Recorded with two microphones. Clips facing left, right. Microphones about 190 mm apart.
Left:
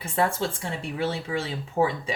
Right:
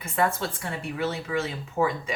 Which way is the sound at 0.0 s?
30° left (ahead or behind).